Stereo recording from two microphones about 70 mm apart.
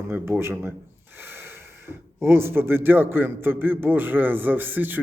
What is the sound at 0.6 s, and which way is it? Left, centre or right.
Gasp, right.